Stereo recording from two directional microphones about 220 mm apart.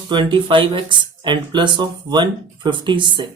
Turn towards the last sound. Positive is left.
turn(degrees=-20)  # may be behind; listen again after turning